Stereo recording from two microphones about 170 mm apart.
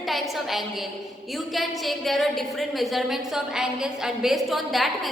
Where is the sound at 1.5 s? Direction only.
Centre (ahead or behind).